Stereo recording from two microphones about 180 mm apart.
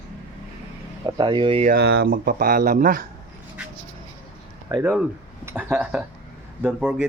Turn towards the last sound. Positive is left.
turn(degrees=-5)  # may be behind; listen again after turning